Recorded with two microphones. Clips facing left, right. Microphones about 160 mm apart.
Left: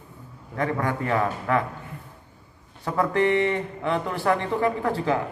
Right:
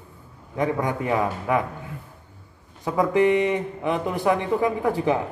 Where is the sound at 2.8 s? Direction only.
15° right (ahead or behind).